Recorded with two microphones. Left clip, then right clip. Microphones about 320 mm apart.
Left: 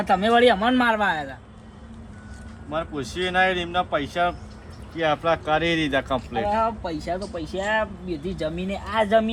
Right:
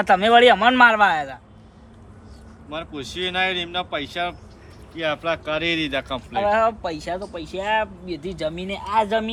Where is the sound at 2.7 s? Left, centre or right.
Centre.